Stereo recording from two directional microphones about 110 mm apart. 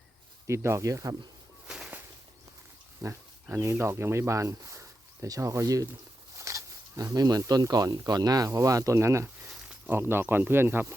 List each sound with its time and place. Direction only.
0.4 s speech: 25° right (ahead or behind)
1.6 s a sound: 5° right (ahead or behind)
3.0 s speech: 30° right (ahead or behind)
9.5 s snake: 5° right (ahead or behind)
9.9 s speech: 20° right (ahead or behind)